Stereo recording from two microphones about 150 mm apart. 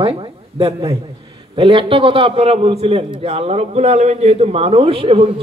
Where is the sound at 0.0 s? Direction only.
40° right (ahead or behind).